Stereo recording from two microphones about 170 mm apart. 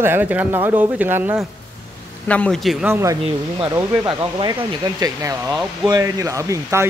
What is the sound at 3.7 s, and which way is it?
Speech, 25° right (ahead or behind).